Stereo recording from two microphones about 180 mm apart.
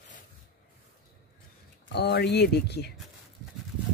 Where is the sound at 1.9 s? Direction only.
65° left (ahead or behind).